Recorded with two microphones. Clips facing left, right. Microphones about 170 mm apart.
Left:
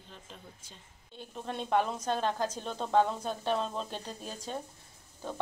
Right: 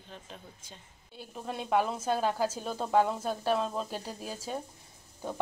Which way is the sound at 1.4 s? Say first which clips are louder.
Right 1 dB; 5° right (ahead or behind).